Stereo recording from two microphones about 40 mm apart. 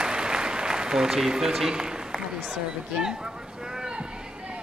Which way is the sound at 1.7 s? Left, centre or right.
Centre.